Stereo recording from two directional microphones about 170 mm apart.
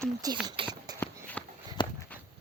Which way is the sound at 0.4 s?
30° right (ahead or behind).